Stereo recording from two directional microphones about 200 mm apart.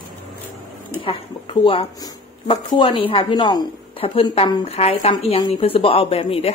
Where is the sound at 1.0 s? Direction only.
25° left (ahead or behind).